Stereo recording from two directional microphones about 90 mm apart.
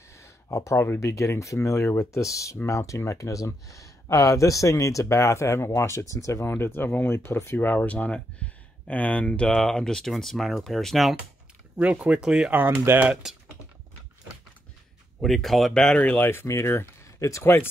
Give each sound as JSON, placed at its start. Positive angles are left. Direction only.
{"t": 0.1, "sound": "speech", "side_deg": 35}
{"t": 11.7, "sound": "speech", "side_deg": -15}
{"t": 12.2, "sound": "speech", "side_deg": -5}
{"t": 12.4, "sound": "speech", "side_deg": -25}
{"t": 13.1, "sound": "speech", "side_deg": -5}
{"t": 15.1, "sound": "speech", "side_deg": 0}